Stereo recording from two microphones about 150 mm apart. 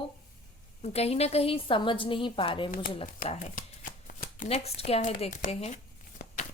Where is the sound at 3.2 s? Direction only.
55° left (ahead or behind).